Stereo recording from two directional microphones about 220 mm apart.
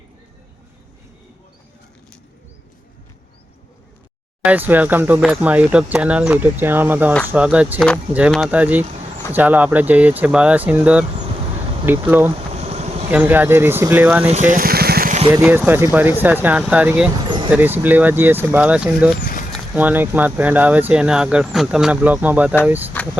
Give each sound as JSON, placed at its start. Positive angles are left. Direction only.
{"t": 4.4, "sound": "speech", "side_deg": -10}
{"t": 12.5, "sound": "vehicle", "side_deg": -30}
{"t": 13.1, "sound": "speech", "side_deg": -10}
{"t": 14.3, "sound": "vehicle", "side_deg": -35}
{"t": 15.3, "sound": "speech", "side_deg": -10}
{"t": 17.2, "sound": "a sound", "side_deg": -20}
{"t": 17.5, "sound": "speech", "side_deg": -10}
{"t": 19.2, "sound": "a sound", "side_deg": 40}
{"t": 19.5, "sound": "speech", "side_deg": -5}